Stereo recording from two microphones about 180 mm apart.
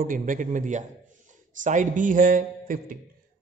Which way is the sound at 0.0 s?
50° right (ahead or behind).